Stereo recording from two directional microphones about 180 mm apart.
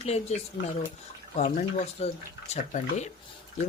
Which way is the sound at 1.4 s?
40° left (ahead or behind).